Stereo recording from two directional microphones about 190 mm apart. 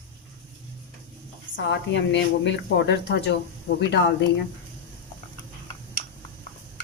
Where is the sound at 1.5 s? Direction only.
70° left (ahead or behind).